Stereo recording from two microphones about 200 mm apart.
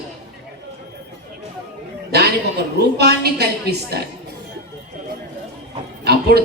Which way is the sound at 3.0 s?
55° right (ahead or behind).